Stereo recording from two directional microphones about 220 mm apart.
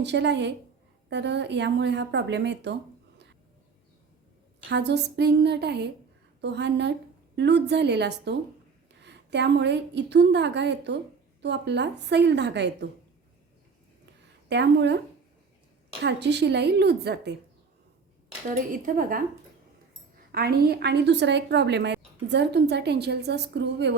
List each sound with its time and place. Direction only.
0.0 s speech: 50° right (ahead or behind)
4.7 s speech: 50° right (ahead or behind)
14.5 s speech: 50° right (ahead or behind)
16.0 s speech: 50° right (ahead or behind)
18.4 s speech: 35° right (ahead or behind)
20.3 s speech: 45° right (ahead or behind)